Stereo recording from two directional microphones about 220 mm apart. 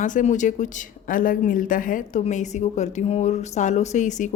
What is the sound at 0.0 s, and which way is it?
A woman's voice, 35° left (ahead or behind).